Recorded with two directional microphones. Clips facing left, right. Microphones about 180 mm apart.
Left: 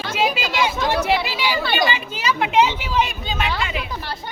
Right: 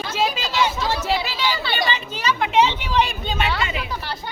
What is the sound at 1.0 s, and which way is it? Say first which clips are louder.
Speech: left 2 dB; 15° left (ahead or behind).